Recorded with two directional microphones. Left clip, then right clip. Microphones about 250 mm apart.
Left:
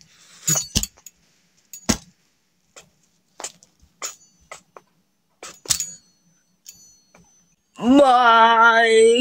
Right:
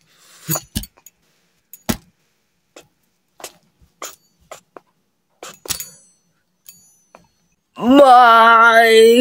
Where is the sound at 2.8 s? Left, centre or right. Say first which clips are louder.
Right 4 dB; centre.